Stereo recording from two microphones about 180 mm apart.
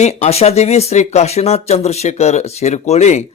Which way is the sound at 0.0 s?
35° left (ahead or behind).